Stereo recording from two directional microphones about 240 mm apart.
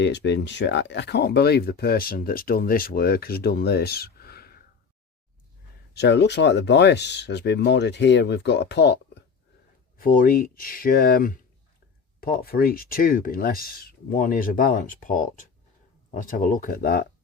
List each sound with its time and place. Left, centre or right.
0.0 s speech: left
5.9 s speech: left